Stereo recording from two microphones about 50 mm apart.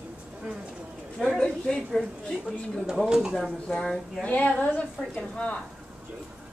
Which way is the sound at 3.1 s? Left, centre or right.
Centre.